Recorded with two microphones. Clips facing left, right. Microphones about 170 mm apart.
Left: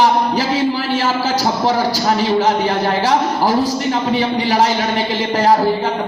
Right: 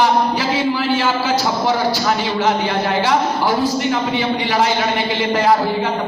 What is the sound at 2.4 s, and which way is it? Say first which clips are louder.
A man's voice: left 2 dB; 40° left (ahead or behind).